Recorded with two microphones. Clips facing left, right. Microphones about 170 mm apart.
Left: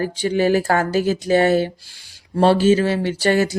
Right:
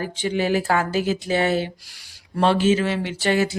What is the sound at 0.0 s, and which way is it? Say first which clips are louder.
Speech: left 5 dB; 40° left (ahead or behind).